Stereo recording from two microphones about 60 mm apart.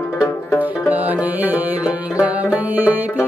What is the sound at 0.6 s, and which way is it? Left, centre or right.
Music, right.